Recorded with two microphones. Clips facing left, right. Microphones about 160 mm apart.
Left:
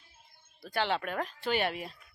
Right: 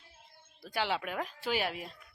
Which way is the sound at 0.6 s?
10° right (ahead or behind).